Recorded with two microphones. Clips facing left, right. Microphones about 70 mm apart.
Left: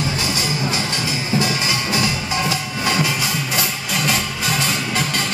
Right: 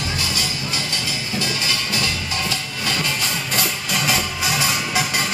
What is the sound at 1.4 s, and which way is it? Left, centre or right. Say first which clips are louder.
Music: left 4 dB; left.